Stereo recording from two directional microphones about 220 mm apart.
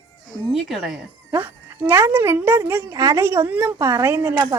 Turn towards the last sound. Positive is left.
turn(degrees=-10)  # may be behind; listen again after turning